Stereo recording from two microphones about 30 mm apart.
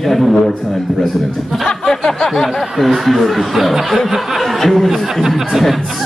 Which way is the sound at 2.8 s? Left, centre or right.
Centre.